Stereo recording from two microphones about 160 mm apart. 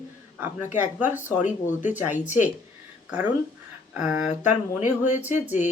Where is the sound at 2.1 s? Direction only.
50° left (ahead or behind).